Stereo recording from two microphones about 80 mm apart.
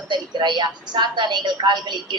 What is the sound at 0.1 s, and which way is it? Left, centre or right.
Speech, right.